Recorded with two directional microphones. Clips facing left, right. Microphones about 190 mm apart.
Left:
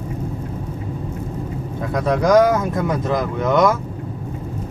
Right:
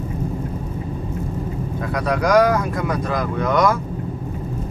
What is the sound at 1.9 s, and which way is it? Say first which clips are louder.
Speech: left 2 dB; 25° left (ahead or behind).